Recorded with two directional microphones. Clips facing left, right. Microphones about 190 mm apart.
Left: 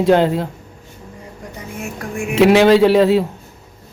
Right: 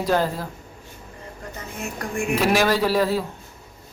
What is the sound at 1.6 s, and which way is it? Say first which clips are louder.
Speech: left 3 dB; 10° left (ahead or behind).